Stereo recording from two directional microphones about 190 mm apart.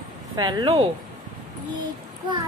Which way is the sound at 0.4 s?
20° right (ahead or behind).